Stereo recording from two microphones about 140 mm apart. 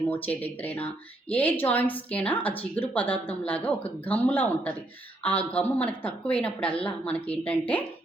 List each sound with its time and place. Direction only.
0.1 s a woman's voice: 10° left (ahead or behind)